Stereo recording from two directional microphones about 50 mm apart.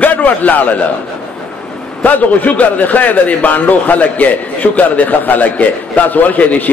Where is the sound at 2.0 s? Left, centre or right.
Left.